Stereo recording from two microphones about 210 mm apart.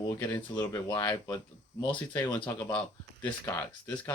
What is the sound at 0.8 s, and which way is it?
Speech, 20° left (ahead or behind).